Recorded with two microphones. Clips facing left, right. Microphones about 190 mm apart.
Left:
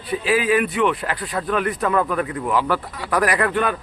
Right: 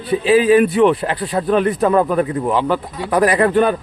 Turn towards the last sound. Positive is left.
turn(degrees=-30)  # may be behind; listen again after turning